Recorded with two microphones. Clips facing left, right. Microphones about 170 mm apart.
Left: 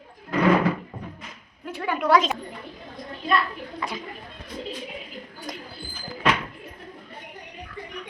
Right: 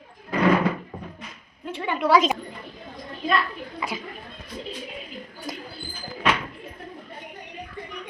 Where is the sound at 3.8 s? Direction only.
5° right (ahead or behind).